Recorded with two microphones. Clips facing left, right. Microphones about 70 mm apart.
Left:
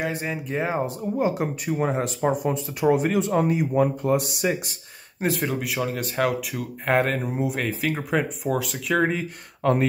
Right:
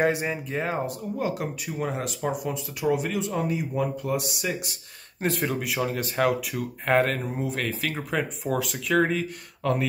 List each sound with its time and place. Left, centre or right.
0.5 s speech: centre
0.8 s speech: left
5.2 s speech: centre
9.6 s speech: left